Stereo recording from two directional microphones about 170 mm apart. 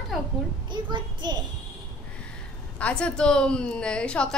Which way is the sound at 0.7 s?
25° right (ahead or behind).